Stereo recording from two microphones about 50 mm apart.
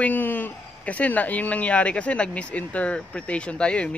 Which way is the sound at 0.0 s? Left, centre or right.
Left.